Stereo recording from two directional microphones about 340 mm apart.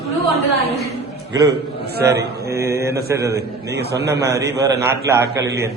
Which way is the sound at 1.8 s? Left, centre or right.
Right.